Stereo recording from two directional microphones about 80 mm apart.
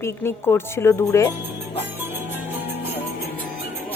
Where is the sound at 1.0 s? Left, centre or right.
Left.